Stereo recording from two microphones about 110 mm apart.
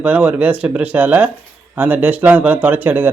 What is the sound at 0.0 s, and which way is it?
Speech, 10° right (ahead or behind).